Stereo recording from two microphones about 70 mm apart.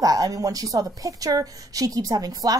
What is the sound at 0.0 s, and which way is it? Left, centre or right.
A woman's voice, right.